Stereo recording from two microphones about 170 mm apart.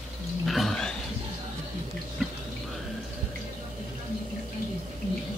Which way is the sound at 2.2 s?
Centre (ahead or behind).